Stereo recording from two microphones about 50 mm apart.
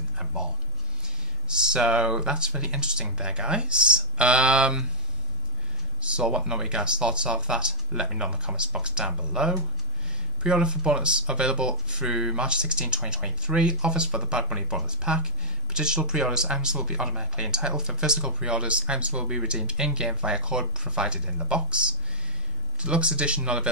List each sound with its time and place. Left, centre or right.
0.2 s a sound: centre
1.0 s speech: centre
5.9 s speech: centre